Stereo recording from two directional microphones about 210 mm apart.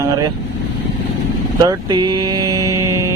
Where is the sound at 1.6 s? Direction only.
20° right (ahead or behind).